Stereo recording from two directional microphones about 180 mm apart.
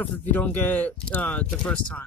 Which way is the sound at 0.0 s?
10° left (ahead or behind).